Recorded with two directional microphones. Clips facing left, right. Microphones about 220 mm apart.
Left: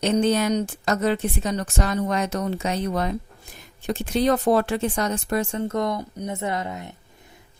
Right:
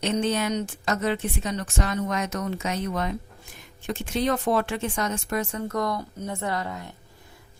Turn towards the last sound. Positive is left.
turn(degrees=20)  # may be behind; listen again after turning